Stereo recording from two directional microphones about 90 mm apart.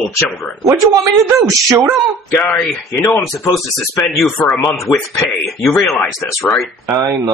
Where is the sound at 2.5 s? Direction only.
25° left (ahead or behind).